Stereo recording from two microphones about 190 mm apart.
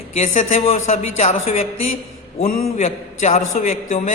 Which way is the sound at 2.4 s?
50° left (ahead or behind).